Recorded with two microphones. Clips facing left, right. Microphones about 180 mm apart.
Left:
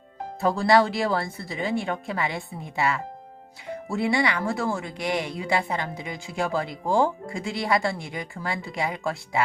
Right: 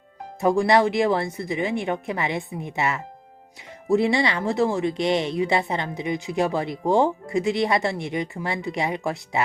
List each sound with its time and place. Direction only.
0.3 s speech: 15° right (ahead or behind)